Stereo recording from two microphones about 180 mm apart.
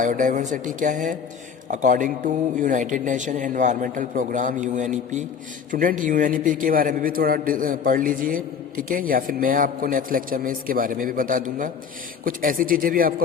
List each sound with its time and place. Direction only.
0.0 s a man's voice: 45° right (ahead or behind)